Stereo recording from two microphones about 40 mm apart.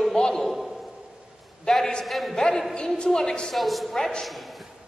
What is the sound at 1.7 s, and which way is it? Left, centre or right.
Speech, left.